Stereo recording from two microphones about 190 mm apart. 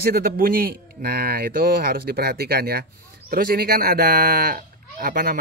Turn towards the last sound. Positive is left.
turn(degrees=-50)  # may be behind; listen again after turning